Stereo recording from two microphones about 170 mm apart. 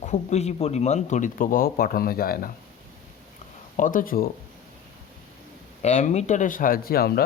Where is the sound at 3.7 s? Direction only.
50° left (ahead or behind).